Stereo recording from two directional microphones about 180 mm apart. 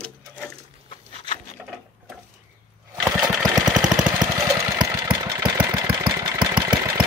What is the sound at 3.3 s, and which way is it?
Engine, centre (ahead or behind).